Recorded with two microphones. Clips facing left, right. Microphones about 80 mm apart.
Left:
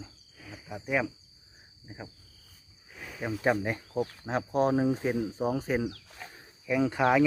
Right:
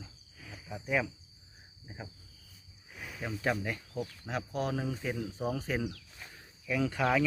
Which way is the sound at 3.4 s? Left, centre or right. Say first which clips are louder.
Left 5 dB; left.